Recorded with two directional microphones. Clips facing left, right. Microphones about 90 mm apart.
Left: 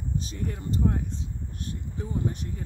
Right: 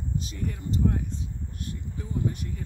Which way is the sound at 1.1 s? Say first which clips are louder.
Even; 25° left (ahead or behind).